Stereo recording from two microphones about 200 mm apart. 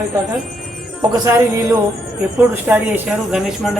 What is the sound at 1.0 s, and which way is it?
Music, 20° right (ahead or behind).